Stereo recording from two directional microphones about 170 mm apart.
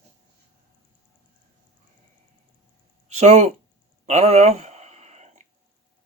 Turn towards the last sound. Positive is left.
turn(degrees=-40)  # may be behind; listen again after turning